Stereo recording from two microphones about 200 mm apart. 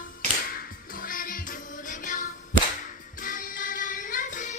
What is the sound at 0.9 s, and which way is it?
Music, 45° left (ahead or behind).